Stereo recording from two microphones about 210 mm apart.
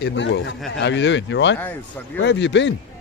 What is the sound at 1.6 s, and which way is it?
Speech, 10° left (ahead or behind).